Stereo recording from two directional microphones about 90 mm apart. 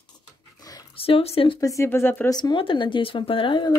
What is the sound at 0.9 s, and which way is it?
Speech, 90° left.